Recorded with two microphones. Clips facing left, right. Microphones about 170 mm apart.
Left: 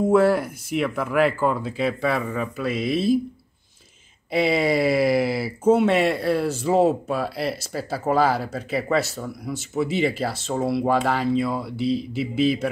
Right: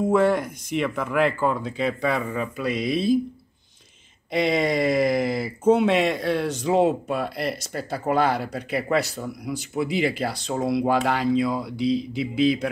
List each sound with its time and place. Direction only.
0.1 s speech: 5° left (ahead or behind)
4.3 s speech: 5° left (ahead or behind)